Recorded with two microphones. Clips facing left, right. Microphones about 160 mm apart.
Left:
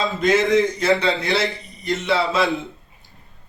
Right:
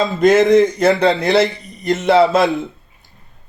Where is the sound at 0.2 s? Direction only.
45° right (ahead or behind).